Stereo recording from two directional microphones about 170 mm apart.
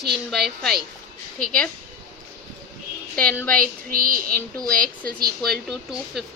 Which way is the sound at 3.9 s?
55° right (ahead or behind).